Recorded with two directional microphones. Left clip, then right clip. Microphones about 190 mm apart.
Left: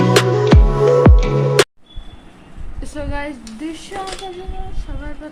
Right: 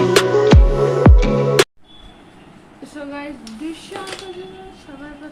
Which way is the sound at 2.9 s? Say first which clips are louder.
Left 4 dB; 50° left (ahead or behind).